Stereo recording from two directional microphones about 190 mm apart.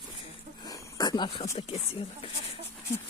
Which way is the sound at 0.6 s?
20° left (ahead or behind).